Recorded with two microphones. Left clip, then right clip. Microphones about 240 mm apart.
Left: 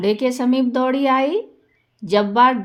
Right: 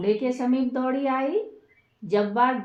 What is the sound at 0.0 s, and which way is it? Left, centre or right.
Speech, left.